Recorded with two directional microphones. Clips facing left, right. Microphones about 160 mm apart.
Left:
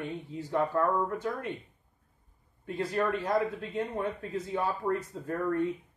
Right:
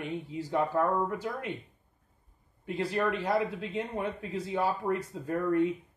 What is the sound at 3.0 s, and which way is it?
Speech, 15° right (ahead or behind).